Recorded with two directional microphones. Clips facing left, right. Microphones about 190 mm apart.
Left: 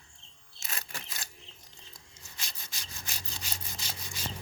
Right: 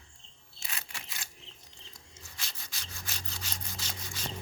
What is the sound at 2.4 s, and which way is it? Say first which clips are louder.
Wood: left 1 dB; 10° left (ahead or behind).